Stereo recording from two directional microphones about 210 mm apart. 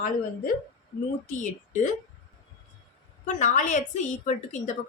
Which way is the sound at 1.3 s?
35° left (ahead or behind).